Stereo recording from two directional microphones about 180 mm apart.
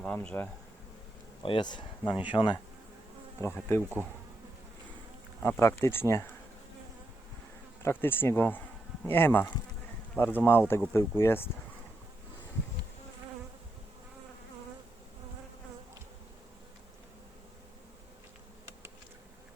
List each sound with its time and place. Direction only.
0.0 s speech: 5° left (ahead or behind)
1.4 s speech: 25° left (ahead or behind)
3.4 s speech: 15° left (ahead or behind)
5.4 s speech: 10° left (ahead or behind)
7.8 s speech: 15° left (ahead or behind)